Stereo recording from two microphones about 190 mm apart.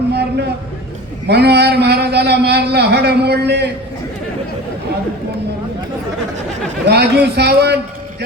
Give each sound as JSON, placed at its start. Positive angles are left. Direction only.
{"t": 0.1, "sound": "a sound", "side_deg": -60}
{"t": 1.3, "sound": "speech", "side_deg": -60}
{"t": 6.8, "sound": "a man's voice", "side_deg": -60}